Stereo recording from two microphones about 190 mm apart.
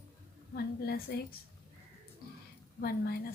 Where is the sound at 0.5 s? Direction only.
55° left (ahead or behind).